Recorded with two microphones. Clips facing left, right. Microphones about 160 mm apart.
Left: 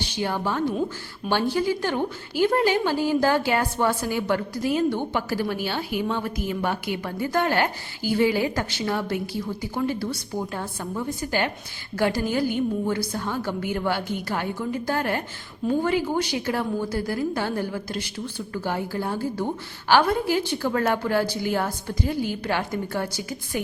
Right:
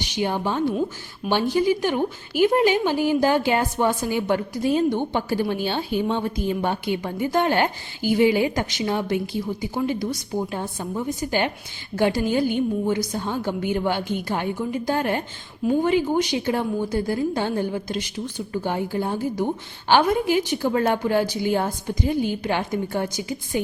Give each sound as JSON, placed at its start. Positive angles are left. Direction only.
{"t": 0.0, "sound": "a woman's voice", "side_deg": -20}